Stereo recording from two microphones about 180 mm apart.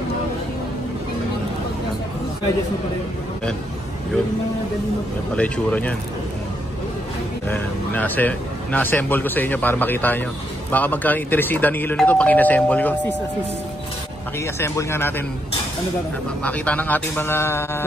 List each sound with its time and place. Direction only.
5.3 s speech: 5° left (ahead or behind)
7.4 s speech: 10° left (ahead or behind)
14.4 s speech: 15° left (ahead or behind)
16.4 s speech: 10° left (ahead or behind)